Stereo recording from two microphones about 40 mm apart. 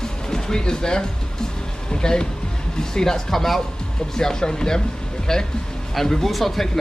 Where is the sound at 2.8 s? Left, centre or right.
Centre.